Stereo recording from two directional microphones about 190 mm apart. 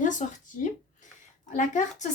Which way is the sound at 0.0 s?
40° left (ahead or behind).